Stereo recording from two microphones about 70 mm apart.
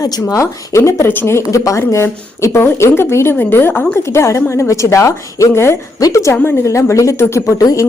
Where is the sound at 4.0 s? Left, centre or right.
Left.